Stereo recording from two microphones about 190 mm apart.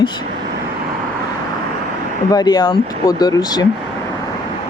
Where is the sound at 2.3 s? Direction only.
20° left (ahead or behind).